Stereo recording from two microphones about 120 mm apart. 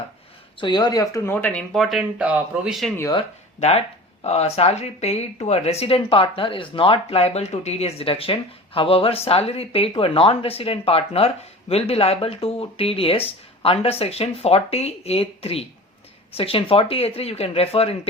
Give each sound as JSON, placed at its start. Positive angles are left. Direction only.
{"t": 0.6, "sound": "speech", "side_deg": 40}
{"t": 1.2, "sound": "speech", "side_deg": 15}
{"t": 1.7, "sound": "speech", "side_deg": 0}
{"t": 3.6, "sound": "speech", "side_deg": 60}